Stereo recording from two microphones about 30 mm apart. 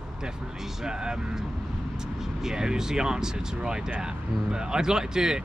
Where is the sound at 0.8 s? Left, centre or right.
Right.